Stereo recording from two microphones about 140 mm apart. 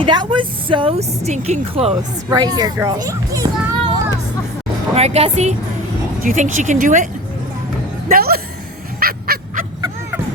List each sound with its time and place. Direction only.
0.0 s speech: 35° right (ahead or behind)
2.3 s a woman's voice: 30° right (ahead or behind)
4.9 s speech: 50° right (ahead or behind)
6.2 s speech: 60° right (ahead or behind)
8.1 s music: 90° right
9.0 s fowl: 90° right